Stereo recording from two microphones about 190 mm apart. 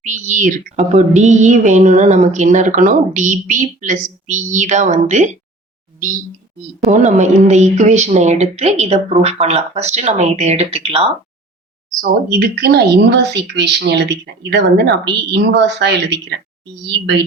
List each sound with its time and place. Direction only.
0.0 s speech: 40° right (ahead or behind)
6.8 s speech: 40° right (ahead or behind)
11.9 s speech: 55° right (ahead or behind)